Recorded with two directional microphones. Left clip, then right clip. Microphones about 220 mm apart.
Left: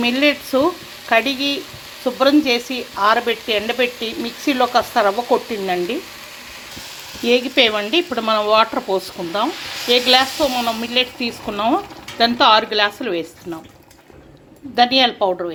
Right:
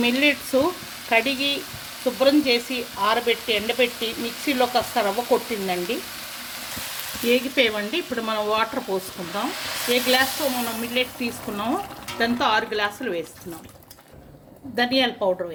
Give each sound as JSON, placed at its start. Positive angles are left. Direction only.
{"t": 0.0, "sound": "speech", "side_deg": 0}
{"t": 7.3, "sound": "speech", "side_deg": 10}
{"t": 14.8, "sound": "speech", "side_deg": 5}